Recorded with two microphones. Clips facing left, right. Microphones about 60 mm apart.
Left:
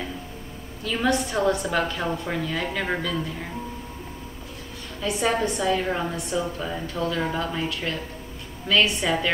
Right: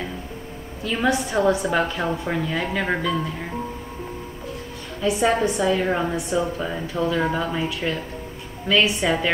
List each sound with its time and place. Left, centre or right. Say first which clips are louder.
0.8 s a woman's voice: right 2 dB; centre
5.0 s a woman's voice: right 4 dB; centre